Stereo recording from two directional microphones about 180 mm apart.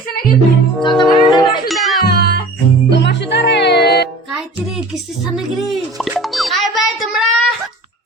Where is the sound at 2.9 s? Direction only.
75° left (ahead or behind).